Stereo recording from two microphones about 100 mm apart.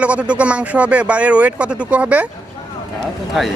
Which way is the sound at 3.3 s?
5° right (ahead or behind).